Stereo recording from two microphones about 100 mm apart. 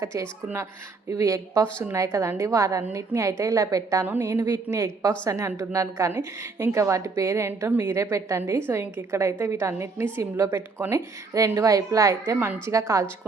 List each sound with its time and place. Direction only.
0.0 s a woman's voice: 30° right (ahead or behind)